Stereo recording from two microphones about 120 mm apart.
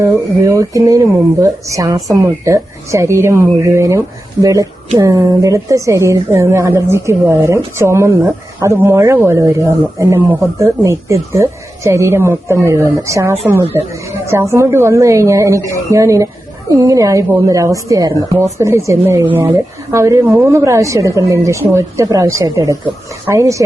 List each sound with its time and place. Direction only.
0.0 s a woman's voice: 25° right (ahead or behind)